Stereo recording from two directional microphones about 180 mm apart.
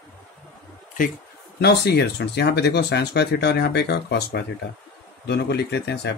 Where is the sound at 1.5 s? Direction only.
65° left (ahead or behind).